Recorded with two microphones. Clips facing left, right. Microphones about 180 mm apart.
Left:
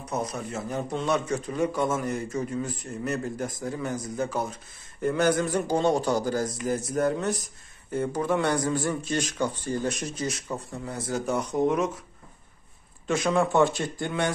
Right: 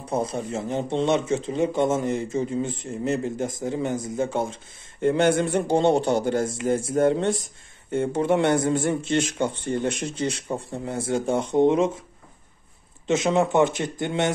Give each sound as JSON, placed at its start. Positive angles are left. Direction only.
{"t": 0.0, "sound": "speech", "side_deg": -30}
{"t": 13.0, "sound": "speech", "side_deg": -20}